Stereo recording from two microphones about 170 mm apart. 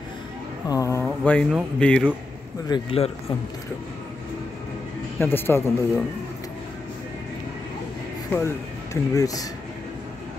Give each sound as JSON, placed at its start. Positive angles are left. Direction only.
{"t": 0.7, "sound": "speech", "side_deg": 20}
{"t": 1.0, "sound": "a sound", "side_deg": 5}
{"t": 1.8, "sound": "a man's voice", "side_deg": 5}
{"t": 2.7, "sound": "speech", "side_deg": 35}
{"t": 5.2, "sound": "a man's voice", "side_deg": 15}
{"t": 8.3, "sound": "speech", "side_deg": 15}